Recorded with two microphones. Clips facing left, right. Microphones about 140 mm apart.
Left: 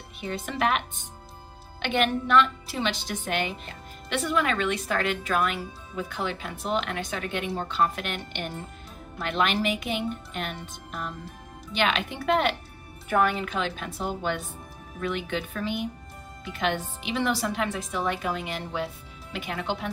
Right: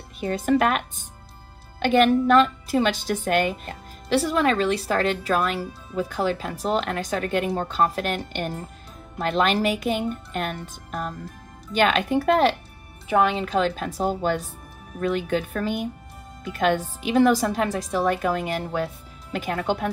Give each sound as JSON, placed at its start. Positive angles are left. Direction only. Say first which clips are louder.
{"t": 0.2, "sound": "a woman's voice", "louder": "right 7 dB", "side_deg": -45}
{"t": 13.1, "sound": "speech", "louder": "right 3 dB", "side_deg": -20}
{"t": 13.5, "sound": "a woman's voice", "louder": "right 7 dB", "side_deg": -40}